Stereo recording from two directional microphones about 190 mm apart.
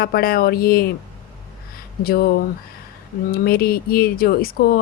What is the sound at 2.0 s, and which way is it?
Speech, 55° left (ahead or behind).